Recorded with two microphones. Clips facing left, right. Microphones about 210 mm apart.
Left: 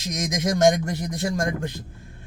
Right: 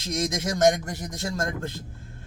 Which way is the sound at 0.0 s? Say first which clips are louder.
Left 1 dB; 15° left (ahead or behind).